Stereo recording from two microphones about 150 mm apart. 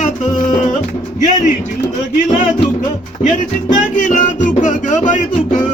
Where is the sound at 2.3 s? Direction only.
55° left (ahead or behind).